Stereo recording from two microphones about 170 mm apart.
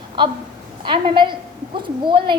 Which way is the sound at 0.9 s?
30° right (ahead or behind).